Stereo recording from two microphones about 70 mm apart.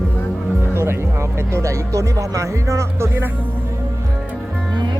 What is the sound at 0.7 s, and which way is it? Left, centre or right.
Speech, right.